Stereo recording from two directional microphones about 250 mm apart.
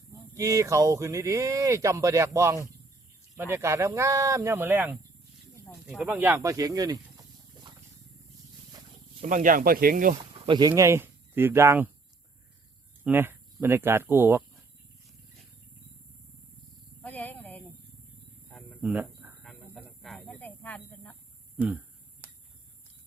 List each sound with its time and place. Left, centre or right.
0.3 s speech: centre
9.2 s speech: right
10.4 s speech: centre
13.1 s speech: centre
17.0 s a sound: centre
22.2 s a sound: centre